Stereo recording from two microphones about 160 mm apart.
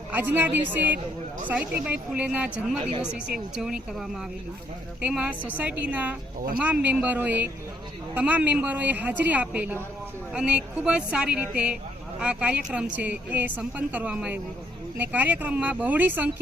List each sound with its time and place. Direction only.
0.1 s a woman's voice: 10° right (ahead or behind)